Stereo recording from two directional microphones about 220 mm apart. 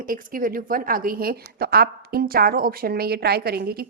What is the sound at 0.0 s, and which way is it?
A woman's voice, 40° right (ahead or behind).